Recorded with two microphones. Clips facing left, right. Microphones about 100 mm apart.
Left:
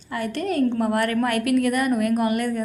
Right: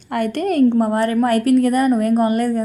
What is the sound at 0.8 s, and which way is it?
A woman's voice, 30° right (ahead or behind).